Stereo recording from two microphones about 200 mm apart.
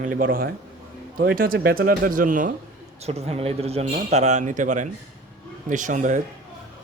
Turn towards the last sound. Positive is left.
turn(degrees=-40)  # may be behind; listen again after turning